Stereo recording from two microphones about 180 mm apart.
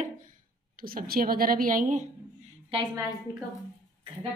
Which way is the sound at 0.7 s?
55° right (ahead or behind).